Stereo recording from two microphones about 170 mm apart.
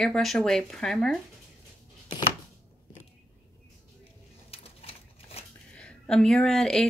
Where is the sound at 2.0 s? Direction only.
25° left (ahead or behind).